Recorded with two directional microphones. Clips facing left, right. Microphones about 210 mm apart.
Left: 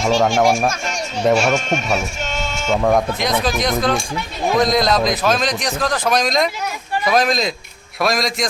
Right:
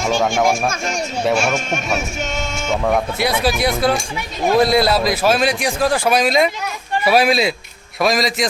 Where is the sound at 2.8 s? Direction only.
5° right (ahead or behind).